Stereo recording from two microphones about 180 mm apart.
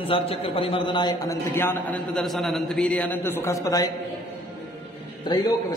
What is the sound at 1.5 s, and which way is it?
A man's voice, 10° left (ahead or behind).